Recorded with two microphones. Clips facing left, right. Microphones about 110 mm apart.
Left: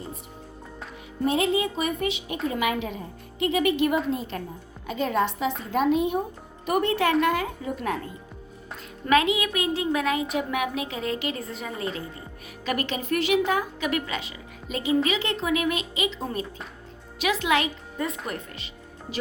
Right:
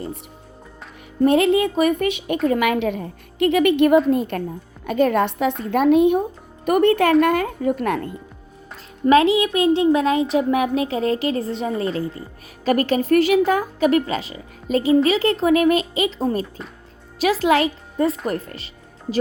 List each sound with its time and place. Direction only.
1.2 s a woman's voice: 60° right (ahead or behind)
9.0 s speech: 30° right (ahead or behind)